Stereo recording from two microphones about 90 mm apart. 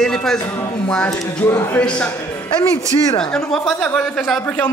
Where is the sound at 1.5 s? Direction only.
25° left (ahead or behind).